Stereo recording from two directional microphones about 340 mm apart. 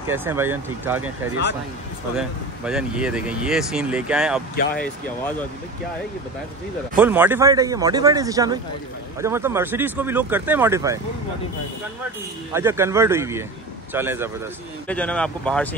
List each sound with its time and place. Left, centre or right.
0.0 s speech: centre
4.6 s speech: left
7.0 s speech: centre
12.5 s speech: centre
14.9 s speech: centre